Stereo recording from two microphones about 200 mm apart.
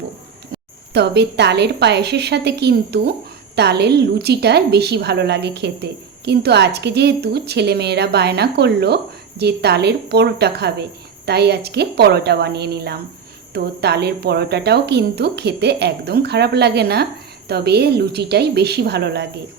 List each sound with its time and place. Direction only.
0.9 s a woman's voice: 55° right (ahead or behind)